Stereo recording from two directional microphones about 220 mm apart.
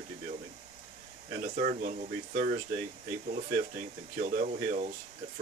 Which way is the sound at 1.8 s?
40° right (ahead or behind).